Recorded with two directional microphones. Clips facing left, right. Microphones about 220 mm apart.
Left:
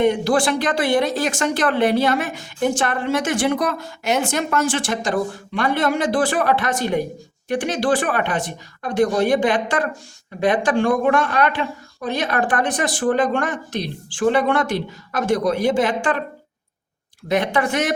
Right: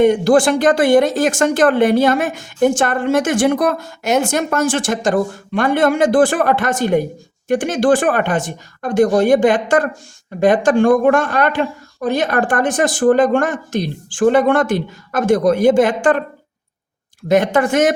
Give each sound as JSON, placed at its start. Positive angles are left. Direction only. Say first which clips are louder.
{"t": 0.0, "sound": "speech", "louder": "right 6 dB", "side_deg": -45}
{"t": 17.2, "sound": "speech", "louder": "right 6 dB", "side_deg": -45}